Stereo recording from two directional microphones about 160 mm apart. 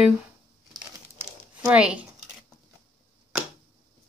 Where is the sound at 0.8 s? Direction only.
10° right (ahead or behind).